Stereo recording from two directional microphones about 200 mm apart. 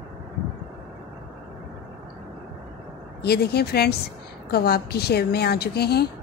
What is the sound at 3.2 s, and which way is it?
A woman's voice, 55° left (ahead or behind).